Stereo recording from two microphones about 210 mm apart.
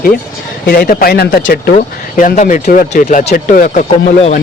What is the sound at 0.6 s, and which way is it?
Speech, 45° left (ahead or behind).